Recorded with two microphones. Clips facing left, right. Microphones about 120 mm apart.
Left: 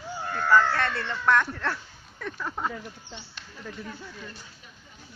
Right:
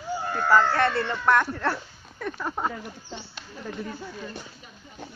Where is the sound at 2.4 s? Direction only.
20° right (ahead or behind).